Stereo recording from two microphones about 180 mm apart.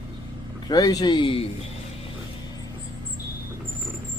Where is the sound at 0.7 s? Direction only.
20° left (ahead or behind).